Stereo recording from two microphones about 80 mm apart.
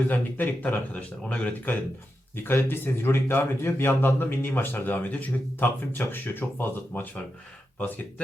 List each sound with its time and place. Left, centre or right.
0.1 s a man's voice: left
2.3 s a man's voice: left